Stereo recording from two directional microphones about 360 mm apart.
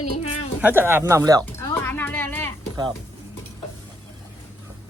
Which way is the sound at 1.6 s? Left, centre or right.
Centre.